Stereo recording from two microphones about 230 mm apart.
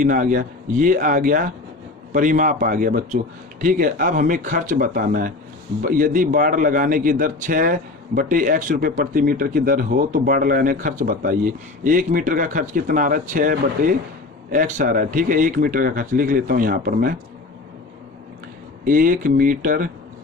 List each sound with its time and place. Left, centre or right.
0.0 s a man's voice: right
18.9 s a man's voice: right